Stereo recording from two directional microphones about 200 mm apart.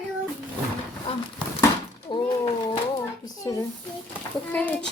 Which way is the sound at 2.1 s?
25° left (ahead or behind).